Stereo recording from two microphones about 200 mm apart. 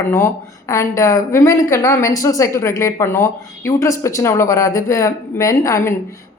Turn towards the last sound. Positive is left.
turn(degrees=15)  # may be behind; listen again after turning